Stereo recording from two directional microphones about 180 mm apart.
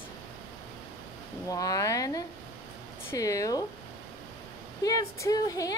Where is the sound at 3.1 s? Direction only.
20° left (ahead or behind).